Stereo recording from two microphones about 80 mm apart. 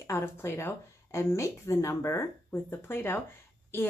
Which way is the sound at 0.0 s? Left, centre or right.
Left.